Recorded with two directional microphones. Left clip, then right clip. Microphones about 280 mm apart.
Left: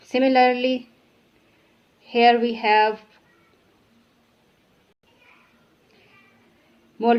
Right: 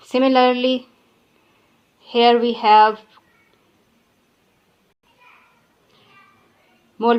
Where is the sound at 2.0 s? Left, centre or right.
Right.